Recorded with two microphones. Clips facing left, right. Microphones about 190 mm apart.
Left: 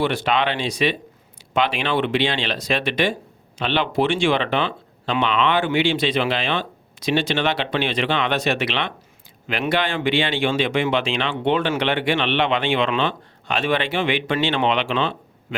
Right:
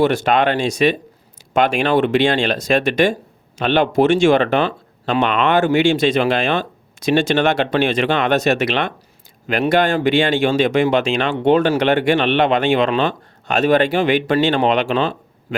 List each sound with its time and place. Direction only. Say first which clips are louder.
0.0 s speech: right 6 dB; 45° right (ahead or behind)